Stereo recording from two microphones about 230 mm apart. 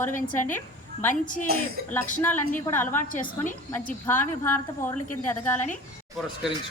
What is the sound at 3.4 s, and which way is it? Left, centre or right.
A woman's voice, centre.